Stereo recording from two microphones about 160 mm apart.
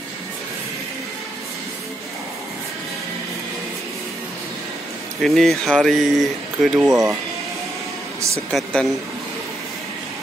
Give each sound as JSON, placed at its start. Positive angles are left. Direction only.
{"t": 5.2, "sound": "speech", "side_deg": 0}
{"t": 6.9, "sound": "speech", "side_deg": -20}
{"t": 8.5, "sound": "speech", "side_deg": 0}